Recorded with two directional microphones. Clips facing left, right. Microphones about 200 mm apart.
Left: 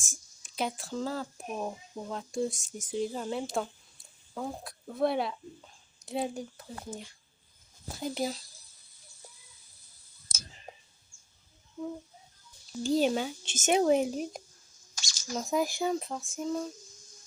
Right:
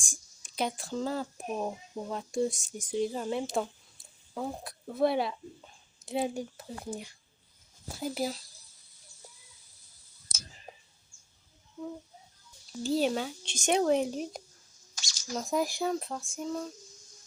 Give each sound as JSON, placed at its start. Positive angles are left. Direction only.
{"t": 0.0, "sound": "a sound", "side_deg": 5}
{"t": 1.1, "sound": "speech", "side_deg": -15}
{"t": 7.9, "sound": "speech", "side_deg": -5}
{"t": 12.7, "sound": "speech", "side_deg": 0}
{"t": 14.9, "sound": "drip", "side_deg": 45}
{"t": 15.3, "sound": "speech", "side_deg": 0}